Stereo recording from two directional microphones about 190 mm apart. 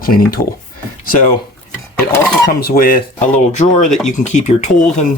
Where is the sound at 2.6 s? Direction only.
50° left (ahead or behind).